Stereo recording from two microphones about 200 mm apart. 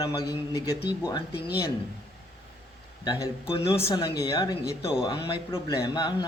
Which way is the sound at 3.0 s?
25° left (ahead or behind).